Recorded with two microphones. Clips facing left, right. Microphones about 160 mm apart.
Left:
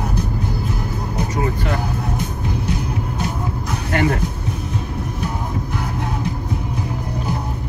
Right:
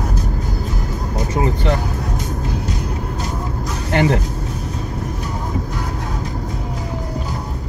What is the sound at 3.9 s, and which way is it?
Vehicle, 25° right (ahead or behind).